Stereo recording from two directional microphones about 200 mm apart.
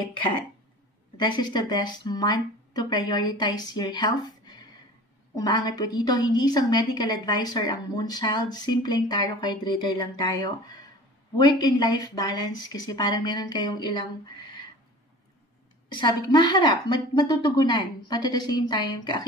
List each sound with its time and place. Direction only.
0.0 s a woman's voice: 25° left (ahead or behind)
5.3 s a woman's voice: 20° left (ahead or behind)
15.9 s a woman's voice: 20° left (ahead or behind)